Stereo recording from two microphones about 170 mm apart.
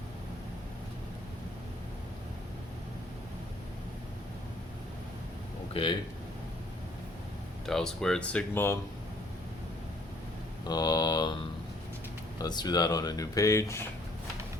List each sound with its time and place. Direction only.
5.7 s speech: 30° left (ahead or behind)
7.7 s speech: 5° left (ahead or behind)
10.6 s speech: 25° left (ahead or behind)
12.4 s speech: 25° left (ahead or behind)